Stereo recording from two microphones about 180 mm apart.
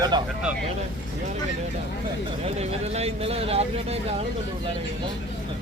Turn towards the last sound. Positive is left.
turn(degrees=-35)  # may be behind; listen again after turning